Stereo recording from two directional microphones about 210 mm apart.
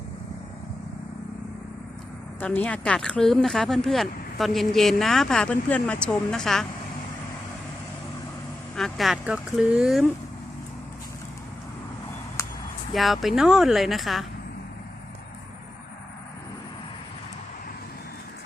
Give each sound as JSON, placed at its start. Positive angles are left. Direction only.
{"t": 2.4, "sound": "speech", "side_deg": 10}
{"t": 8.7, "sound": "speech", "side_deg": 0}
{"t": 12.4, "sound": "a sound", "side_deg": 15}
{"t": 12.9, "sound": "speech", "side_deg": 0}